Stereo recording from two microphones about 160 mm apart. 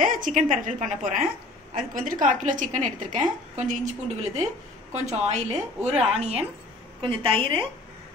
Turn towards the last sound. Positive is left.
turn(degrees=-35)  # may be behind; listen again after turning